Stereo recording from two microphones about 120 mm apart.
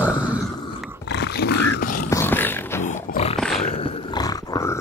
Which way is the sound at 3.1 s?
55° left (ahead or behind).